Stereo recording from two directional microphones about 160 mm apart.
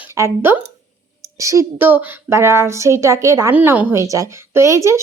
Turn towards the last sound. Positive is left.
turn(degrees=-20)  # may be behind; listen again after turning